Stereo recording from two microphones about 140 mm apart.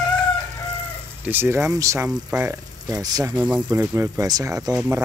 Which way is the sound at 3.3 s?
10° right (ahead or behind).